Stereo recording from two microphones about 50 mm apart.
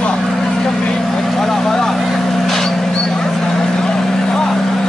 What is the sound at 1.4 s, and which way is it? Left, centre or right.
Vehicle, centre.